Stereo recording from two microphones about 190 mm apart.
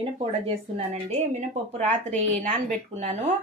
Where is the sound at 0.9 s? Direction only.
35° right (ahead or behind).